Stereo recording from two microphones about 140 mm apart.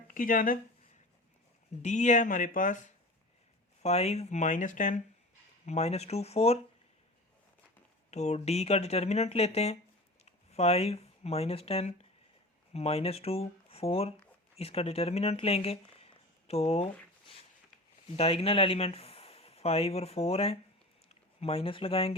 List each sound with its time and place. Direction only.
0.1 s speech: 75° left (ahead or behind)
1.8 s speech: 55° left (ahead or behind)
3.8 s speech: 50° left (ahead or behind)
5.6 s speech: 50° left (ahead or behind)
8.1 s speech: 55° left (ahead or behind)
18.2 s speech: 45° left (ahead or behind)